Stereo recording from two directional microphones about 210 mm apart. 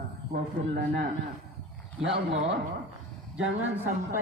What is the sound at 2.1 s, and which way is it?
Speech, 65° right (ahead or behind).